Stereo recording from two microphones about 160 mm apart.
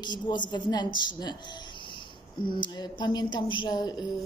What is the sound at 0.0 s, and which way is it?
A woman's voice, 30° left (ahead or behind).